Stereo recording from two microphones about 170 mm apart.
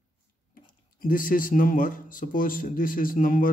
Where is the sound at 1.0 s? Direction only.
55° left (ahead or behind).